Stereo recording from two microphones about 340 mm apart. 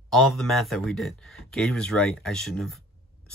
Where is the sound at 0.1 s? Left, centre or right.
Centre.